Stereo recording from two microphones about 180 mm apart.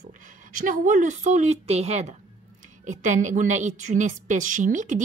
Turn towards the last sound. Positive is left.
turn(degrees=-45)  # may be behind; listen again after turning